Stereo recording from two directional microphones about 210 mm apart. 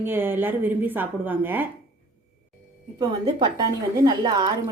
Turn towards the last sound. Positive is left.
turn(degrees=-20)  # may be behind; listen again after turning